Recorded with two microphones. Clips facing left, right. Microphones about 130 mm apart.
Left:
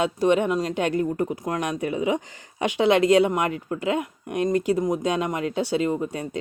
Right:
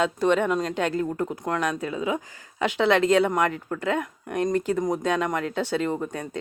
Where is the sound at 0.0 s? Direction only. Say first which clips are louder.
Left 1 dB; 15° left (ahead or behind).